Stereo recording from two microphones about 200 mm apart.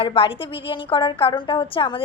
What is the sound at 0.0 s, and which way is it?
A woman's voice, 25° left (ahead or behind).